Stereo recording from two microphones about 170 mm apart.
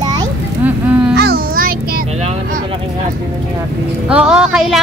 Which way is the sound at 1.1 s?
60° right (ahead or behind).